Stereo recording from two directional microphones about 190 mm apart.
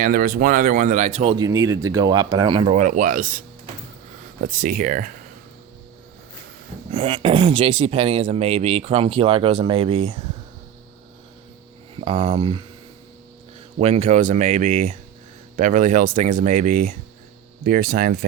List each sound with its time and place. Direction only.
0.0 s speech: 50° right (ahead or behind)
4.4 s speech: 45° right (ahead or behind)
6.9 s speech: 30° right (ahead or behind)
11.9 s speech: 30° right (ahead or behind)
13.7 s speech: 35° right (ahead or behind); by 18.3 s 50° right (ahead or behind)